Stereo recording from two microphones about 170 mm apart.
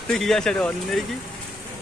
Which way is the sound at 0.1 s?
5° left (ahead or behind).